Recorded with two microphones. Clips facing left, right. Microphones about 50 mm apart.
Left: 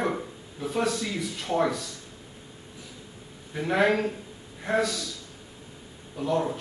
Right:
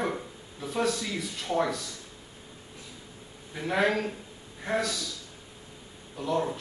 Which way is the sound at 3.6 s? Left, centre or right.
Centre.